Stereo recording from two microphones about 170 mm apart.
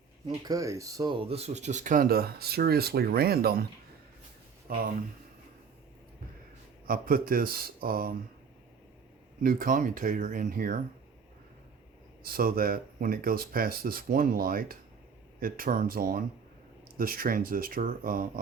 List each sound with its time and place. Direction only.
0.4 s speech: 20° right (ahead or behind); by 3.7 s 60° right (ahead or behind)
4.7 s speech: 60° right (ahead or behind)
6.8 s speech: 60° right (ahead or behind)
9.4 s speech: 60° right (ahead or behind)
12.2 s speech: 60° right (ahead or behind)